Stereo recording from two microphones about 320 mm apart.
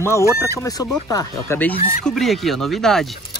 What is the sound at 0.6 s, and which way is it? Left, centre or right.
Speech, centre.